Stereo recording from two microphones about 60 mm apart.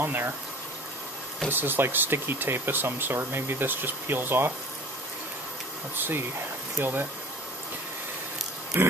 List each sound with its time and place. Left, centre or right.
0.0 s speech: right
1.5 s speech: right
5.9 s speech: right
8.7 s speech: right